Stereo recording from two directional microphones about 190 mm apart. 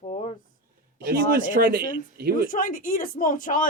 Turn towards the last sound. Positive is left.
turn(degrees=45)  # may be behind; listen again after turning